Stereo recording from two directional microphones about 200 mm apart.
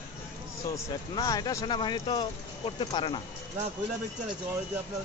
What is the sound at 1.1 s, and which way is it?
Speech, 20° left (ahead or behind).